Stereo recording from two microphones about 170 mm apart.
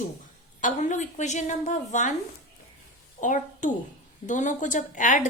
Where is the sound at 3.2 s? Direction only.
50° left (ahead or behind).